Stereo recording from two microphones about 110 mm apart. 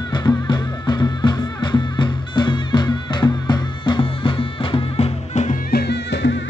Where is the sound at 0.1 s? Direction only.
40° left (ahead or behind); by 5.5 s 80° left.